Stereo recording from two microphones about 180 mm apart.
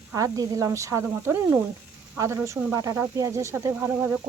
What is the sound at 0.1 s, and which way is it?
Speech, 20° right (ahead or behind).